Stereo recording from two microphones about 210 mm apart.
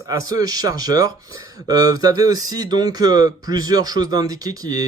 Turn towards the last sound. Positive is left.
turn(degrees=-15)  # may be behind; listen again after turning